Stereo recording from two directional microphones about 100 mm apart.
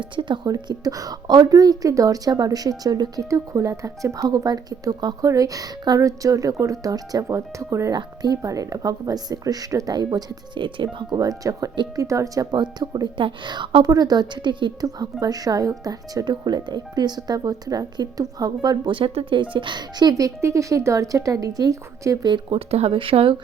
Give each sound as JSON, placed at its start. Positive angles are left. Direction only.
{"t": 0.0, "sound": "speech", "side_deg": -50}
{"t": 7.9, "sound": "a woman's voice", "side_deg": -40}
{"t": 22.4, "sound": "speech", "side_deg": -85}